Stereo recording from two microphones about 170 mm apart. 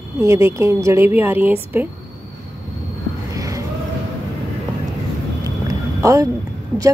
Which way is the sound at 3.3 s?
20° right (ahead or behind).